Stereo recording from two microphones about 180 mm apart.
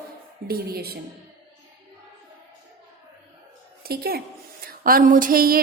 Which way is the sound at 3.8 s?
60° right (ahead or behind).